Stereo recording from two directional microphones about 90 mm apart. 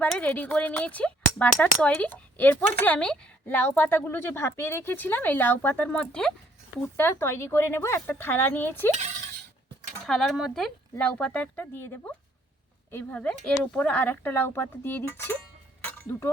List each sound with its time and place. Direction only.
0.0 s speech: 15° left (ahead or behind)
6.9 s speech: 25° left (ahead or behind)
10.1 s speech: 5° left (ahead or behind); by 15.4 s 25° left (ahead or behind)
15.8 s a sound: 25° left (ahead or behind)